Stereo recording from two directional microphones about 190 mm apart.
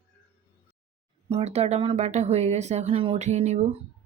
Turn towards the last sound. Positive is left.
turn(degrees=-35)  # may be behind; listen again after turning